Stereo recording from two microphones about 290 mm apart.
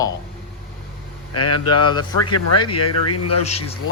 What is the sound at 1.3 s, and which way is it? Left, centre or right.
Speech, left.